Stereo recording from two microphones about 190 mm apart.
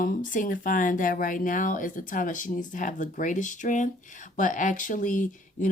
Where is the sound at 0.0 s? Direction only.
45° left (ahead or behind).